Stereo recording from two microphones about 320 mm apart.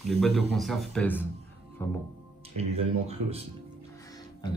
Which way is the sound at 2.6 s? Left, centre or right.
Centre.